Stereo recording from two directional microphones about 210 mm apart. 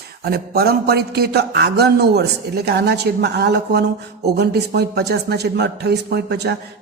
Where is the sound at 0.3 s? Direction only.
45° right (ahead or behind).